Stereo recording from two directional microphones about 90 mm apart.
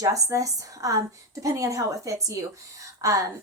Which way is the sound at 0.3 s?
40° right (ahead or behind).